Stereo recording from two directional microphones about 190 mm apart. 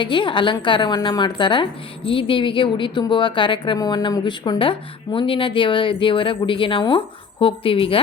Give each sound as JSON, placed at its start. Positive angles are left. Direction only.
{"t": 0.0, "sound": "a woman's voice", "side_deg": 25}